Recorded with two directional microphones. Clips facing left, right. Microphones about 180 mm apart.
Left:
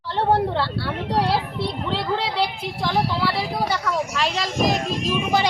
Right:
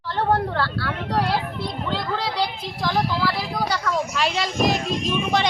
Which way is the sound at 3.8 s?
Centre (ahead or behind).